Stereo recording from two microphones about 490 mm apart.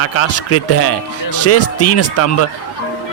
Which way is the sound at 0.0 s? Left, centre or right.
Left.